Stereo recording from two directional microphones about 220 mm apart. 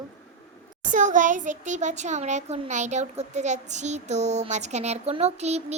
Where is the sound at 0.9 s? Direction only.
35° right (ahead or behind).